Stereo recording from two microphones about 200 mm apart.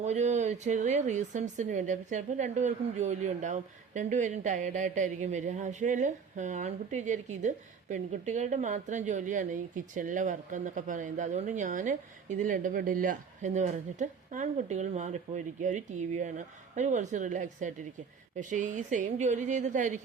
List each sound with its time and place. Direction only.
0.0 s speech: 35° right (ahead or behind)